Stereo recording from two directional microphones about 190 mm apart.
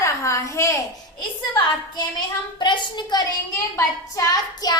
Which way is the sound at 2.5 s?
25° left (ahead or behind).